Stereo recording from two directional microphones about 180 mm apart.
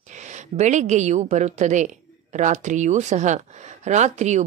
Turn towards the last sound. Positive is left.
turn(degrees=-40)  # may be behind; listen again after turning